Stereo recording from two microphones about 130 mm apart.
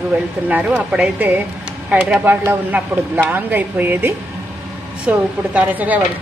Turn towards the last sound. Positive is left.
turn(degrees=-10)  # may be behind; listen again after turning